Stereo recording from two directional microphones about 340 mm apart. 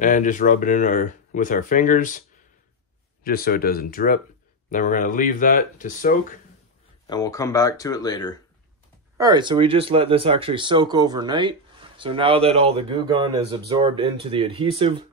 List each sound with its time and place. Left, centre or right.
0.0 s speech: left
3.3 s speech: left
7.1 s speech: centre
9.2 s speech: centre